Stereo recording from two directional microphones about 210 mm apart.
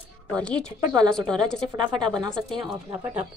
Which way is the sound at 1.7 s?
25° right (ahead or behind).